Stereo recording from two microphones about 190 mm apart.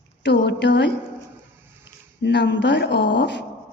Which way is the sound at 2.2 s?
65° left (ahead or behind).